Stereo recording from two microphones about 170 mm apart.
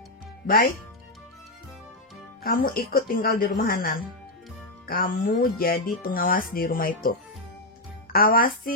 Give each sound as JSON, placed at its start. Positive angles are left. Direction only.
{"t": 0.5, "sound": "speech", "side_deg": 60}
{"t": 2.4, "sound": "speech", "side_deg": 60}